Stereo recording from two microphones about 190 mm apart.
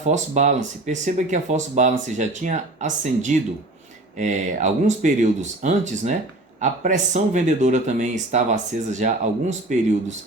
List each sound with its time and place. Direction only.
0.0 s speech: 40° right (ahead or behind)